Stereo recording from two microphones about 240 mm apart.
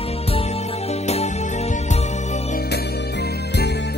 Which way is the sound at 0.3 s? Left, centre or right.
Left.